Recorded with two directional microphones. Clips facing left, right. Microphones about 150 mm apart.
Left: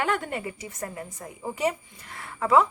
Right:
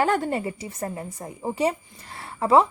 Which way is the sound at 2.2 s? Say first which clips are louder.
Right 3 dB; 30° right (ahead or behind).